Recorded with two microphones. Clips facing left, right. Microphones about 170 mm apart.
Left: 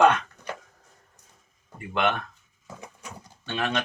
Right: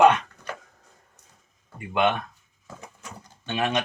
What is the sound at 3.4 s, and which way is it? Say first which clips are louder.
Speech: right 2 dB; 20° right (ahead or behind).